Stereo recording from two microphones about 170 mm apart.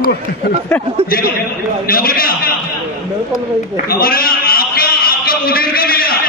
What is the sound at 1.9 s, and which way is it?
Speech, 60° left (ahead or behind).